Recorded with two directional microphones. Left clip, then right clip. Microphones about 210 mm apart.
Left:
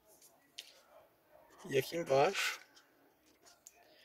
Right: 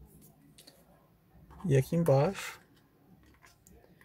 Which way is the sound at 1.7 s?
5° right (ahead or behind).